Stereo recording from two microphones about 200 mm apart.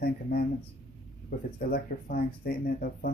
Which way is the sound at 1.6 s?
45° left (ahead or behind).